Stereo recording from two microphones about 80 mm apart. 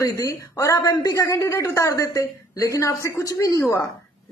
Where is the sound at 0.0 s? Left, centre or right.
Left.